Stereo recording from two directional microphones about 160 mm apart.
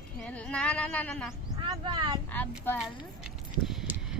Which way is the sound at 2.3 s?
10° left (ahead or behind).